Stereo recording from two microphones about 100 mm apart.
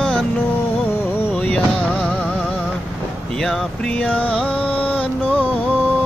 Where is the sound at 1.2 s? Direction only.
15° left (ahead or behind).